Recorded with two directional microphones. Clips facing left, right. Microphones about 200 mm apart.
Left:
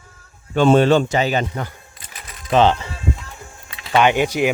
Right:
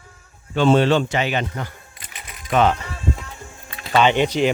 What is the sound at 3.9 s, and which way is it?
Speech, 15° left (ahead or behind).